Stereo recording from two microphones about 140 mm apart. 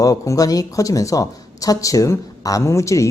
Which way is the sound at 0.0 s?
25° left (ahead or behind).